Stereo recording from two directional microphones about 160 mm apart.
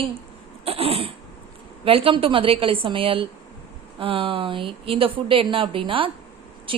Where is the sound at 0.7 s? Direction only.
40° right (ahead or behind).